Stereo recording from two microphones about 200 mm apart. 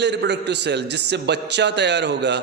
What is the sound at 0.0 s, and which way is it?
A man's voice, 60° right (ahead or behind).